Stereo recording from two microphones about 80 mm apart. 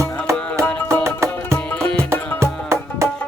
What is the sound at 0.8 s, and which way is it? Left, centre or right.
Music, right.